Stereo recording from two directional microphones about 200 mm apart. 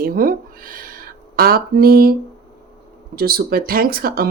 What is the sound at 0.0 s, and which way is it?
Speech, 45° right (ahead or behind).